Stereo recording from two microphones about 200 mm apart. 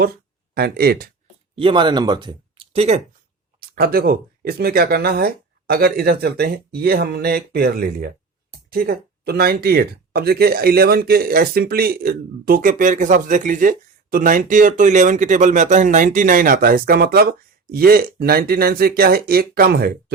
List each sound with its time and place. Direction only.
0.5 s speech: 50° right (ahead or behind)
1.5 s speech: 25° right (ahead or behind)
3.6 s speech: 50° right (ahead or behind)